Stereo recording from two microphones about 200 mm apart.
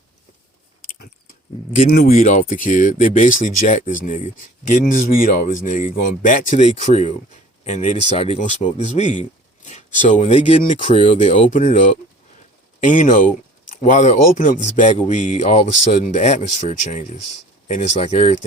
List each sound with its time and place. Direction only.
1.7 s speech: 40° left (ahead or behind)